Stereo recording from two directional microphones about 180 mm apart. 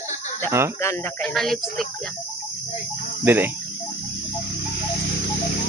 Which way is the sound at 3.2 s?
10° right (ahead or behind).